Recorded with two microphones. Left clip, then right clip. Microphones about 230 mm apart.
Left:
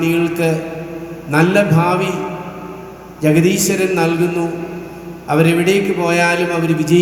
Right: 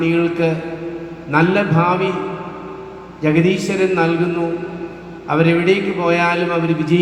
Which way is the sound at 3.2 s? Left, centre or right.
Left.